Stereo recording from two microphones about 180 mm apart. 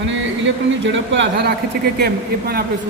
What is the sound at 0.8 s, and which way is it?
Speech, 85° right.